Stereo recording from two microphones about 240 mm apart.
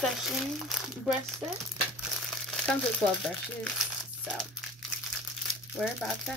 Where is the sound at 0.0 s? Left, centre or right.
Centre.